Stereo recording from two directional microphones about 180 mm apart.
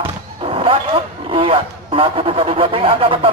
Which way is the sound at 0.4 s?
30° right (ahead or behind).